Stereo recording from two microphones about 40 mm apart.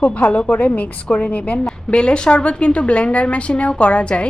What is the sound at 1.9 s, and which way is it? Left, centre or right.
A woman's voice, left.